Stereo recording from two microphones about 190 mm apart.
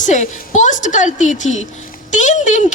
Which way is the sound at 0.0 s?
40° left (ahead or behind).